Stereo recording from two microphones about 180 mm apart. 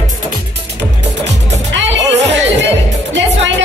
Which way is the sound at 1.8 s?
80° right.